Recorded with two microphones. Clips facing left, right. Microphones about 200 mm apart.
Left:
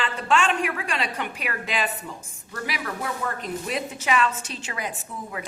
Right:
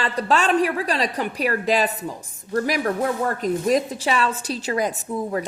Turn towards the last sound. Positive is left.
turn(degrees=-40)  # may be behind; listen again after turning